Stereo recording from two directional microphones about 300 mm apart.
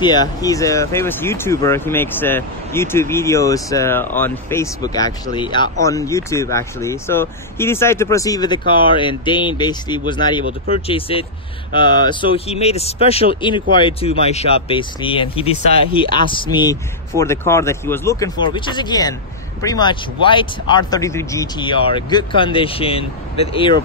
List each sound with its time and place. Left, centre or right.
0.0 s speech: centre